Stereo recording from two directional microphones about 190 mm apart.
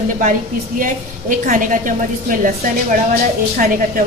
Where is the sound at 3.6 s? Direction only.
45° right (ahead or behind).